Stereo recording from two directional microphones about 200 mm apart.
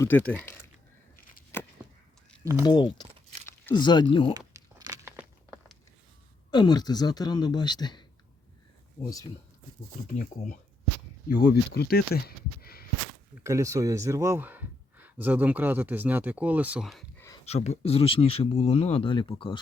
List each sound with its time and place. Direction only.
0.0 s speech: 10° left (ahead or behind)
1.5 s chop: 10° left (ahead or behind)
2.4 s speech: 15° right (ahead or behind)
2.6 s speech: 20° left (ahead or behind)
4.4 s a sound: 20° right (ahead or behind)
6.5 s speech: 20° left (ahead or behind)
11.4 s speech: 50° left (ahead or behind)
13.4 s speech: 15° right (ahead or behind); by 17.1 s centre (ahead or behind)
17.2 s a sound: 15° left (ahead or behind)
17.4 s speech: 30° left (ahead or behind)